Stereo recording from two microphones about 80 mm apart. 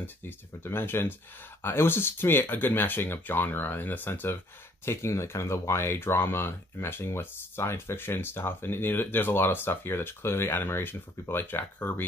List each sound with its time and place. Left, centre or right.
0.7 s speech: left
4.8 s speech: left